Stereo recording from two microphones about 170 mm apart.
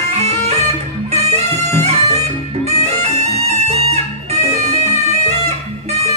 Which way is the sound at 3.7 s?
40° right (ahead or behind).